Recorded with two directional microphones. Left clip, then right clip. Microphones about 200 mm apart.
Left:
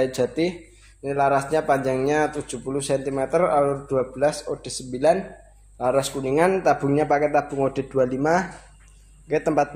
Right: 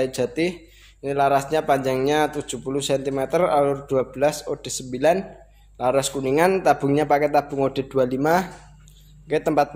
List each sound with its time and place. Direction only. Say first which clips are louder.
0.0 s a man's voice: left 1 dB; 10° right (ahead or behind)